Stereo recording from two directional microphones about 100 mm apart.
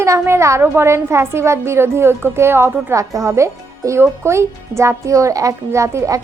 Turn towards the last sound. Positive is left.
turn(degrees=-30)  # may be behind; listen again after turning